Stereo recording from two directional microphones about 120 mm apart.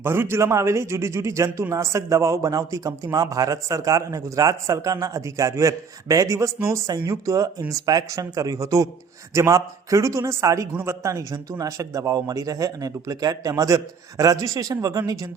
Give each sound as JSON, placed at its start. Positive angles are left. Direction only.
{"t": 0.0, "sound": "a man's voice", "side_deg": -20}